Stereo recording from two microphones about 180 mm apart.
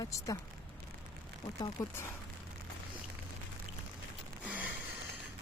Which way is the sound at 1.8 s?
20° left (ahead or behind).